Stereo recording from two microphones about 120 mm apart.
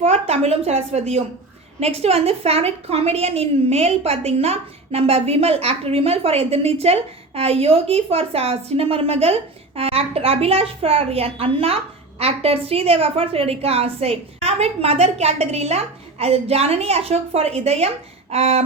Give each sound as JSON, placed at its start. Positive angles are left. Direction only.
{"t": 0.0, "sound": "a woman's voice", "side_deg": -60}